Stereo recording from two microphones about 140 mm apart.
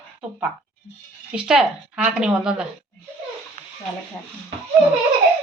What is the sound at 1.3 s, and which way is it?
Speech, 5° right (ahead or behind).